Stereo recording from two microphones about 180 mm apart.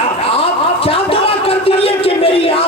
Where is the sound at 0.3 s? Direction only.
30° left (ahead or behind).